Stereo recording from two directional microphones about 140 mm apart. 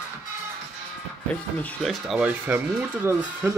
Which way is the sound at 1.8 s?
5° right (ahead or behind).